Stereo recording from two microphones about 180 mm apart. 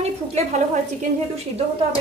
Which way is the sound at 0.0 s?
35° right (ahead or behind).